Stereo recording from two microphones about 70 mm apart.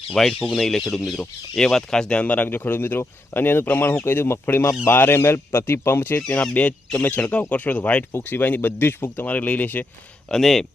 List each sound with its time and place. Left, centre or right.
0.1 s speech: centre; by 6.2 s left
6.2 s speech: left
10.2 s speech: centre